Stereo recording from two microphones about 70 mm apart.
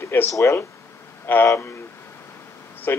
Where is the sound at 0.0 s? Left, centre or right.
Left.